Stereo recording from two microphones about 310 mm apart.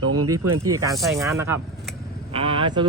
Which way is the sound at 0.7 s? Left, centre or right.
Centre.